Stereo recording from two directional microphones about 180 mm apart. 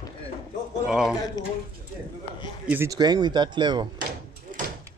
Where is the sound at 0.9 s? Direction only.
Centre (ahead or behind).